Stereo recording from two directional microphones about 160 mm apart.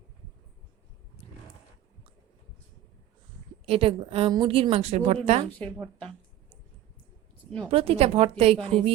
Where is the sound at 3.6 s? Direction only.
35° right (ahead or behind).